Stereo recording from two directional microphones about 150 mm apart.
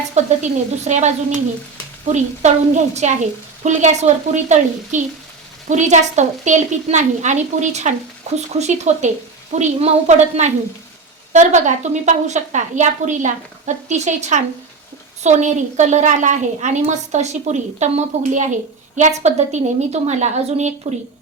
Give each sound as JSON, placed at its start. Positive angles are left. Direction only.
{"t": 0.1, "sound": "a woman's voice", "side_deg": -55}
{"t": 2.1, "sound": "a woman's voice", "side_deg": -50}